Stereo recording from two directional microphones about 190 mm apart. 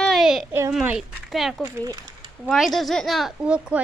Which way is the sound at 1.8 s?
20° right (ahead or behind).